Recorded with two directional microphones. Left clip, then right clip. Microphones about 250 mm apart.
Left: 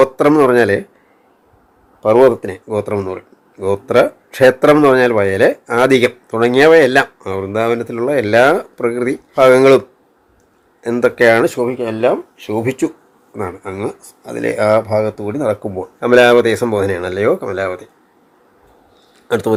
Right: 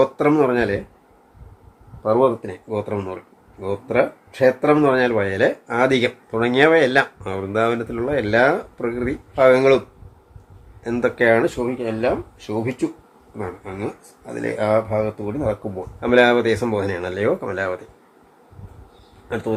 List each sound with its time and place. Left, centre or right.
0.0 s speech: left
2.0 s speech: left
10.8 s speech: left